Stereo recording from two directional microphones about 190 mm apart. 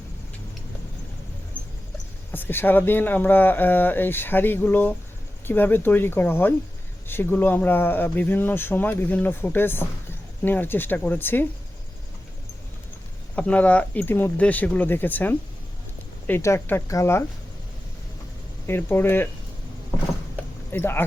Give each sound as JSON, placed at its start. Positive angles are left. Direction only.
{"t": 1.6, "sound": "mouse", "side_deg": 10}
{"t": 2.3, "sound": "speech", "side_deg": 10}
{"t": 13.3, "sound": "speech", "side_deg": 5}
{"t": 18.6, "sound": "speech", "side_deg": 10}
{"t": 20.7, "sound": "speech", "side_deg": 10}